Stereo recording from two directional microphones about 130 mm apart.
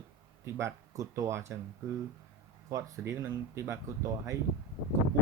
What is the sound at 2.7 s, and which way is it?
Speech, 25° right (ahead or behind).